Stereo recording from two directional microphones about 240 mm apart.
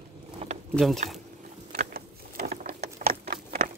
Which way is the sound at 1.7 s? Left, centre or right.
Right.